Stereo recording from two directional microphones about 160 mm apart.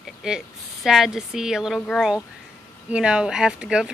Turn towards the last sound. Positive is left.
turn(degrees=-5)  # may be behind; listen again after turning